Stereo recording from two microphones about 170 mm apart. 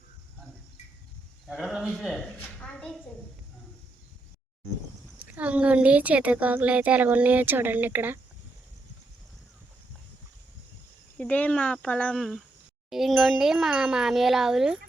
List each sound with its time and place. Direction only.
1.5 s a woman's voice: centre (ahead or behind)
5.2 s speech: 10° right (ahead or behind)
11.2 s speech: 10° left (ahead or behind)